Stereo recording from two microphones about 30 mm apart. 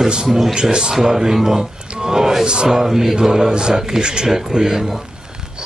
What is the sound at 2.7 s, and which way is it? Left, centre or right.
A man's voice, centre.